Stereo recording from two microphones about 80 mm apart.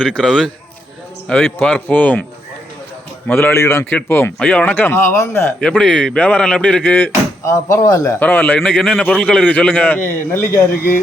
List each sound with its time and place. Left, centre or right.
0.0 s a man's voice: centre
3.2 s speech: left
3.8 s speech: left
5.5 s a man's voice: centre
7.4 s speech: left
8.2 s speech: left
8.5 s a man's voice: centre; by 10.6 s left